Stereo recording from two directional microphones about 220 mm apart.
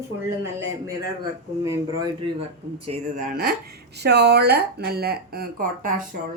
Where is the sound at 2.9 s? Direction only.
35° right (ahead or behind).